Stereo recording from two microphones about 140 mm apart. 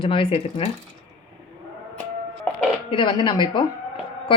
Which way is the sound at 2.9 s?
35° left (ahead or behind).